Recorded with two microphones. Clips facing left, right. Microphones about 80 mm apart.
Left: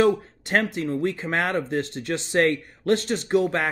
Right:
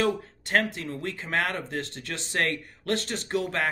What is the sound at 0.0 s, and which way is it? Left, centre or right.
Speech, centre.